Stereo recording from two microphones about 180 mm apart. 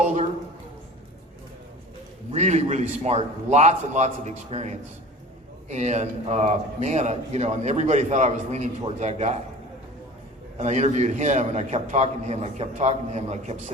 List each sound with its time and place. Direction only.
0.0 s a sound: 40° right (ahead or behind)
2.3 s a man's voice: 40° right (ahead or behind)
10.6 s a man's voice: 40° right (ahead or behind)